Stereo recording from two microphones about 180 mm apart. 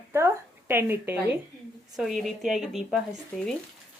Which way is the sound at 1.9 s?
Centre (ahead or behind).